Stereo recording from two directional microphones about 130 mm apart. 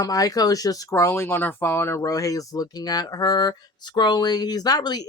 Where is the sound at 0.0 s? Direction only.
30° left (ahead or behind).